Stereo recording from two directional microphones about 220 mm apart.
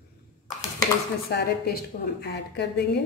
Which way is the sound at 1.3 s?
45° left (ahead or behind).